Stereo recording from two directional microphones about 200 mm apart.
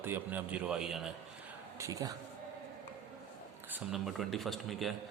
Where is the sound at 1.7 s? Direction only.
15° right (ahead or behind).